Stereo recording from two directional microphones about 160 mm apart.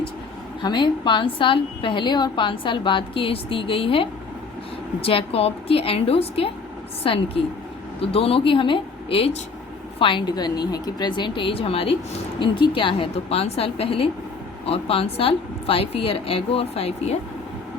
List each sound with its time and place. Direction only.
0.6 s a woman's voice: 30° left (ahead or behind)